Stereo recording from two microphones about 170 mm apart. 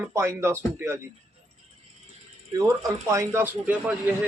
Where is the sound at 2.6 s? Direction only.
20° right (ahead or behind).